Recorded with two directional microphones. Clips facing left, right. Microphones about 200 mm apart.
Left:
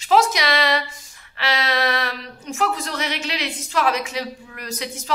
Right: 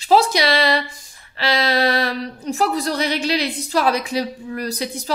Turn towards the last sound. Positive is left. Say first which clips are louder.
# right 5 dB
turn(degrees=-35)  # may be behind; listen again after turning